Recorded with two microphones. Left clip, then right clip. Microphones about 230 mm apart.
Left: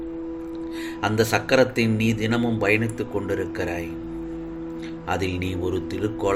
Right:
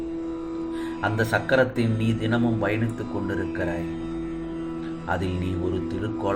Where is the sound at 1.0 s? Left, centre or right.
Left.